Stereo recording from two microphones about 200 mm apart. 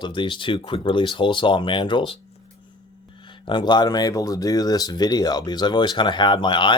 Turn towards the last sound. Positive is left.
turn(degrees=25)  # may be behind; listen again after turning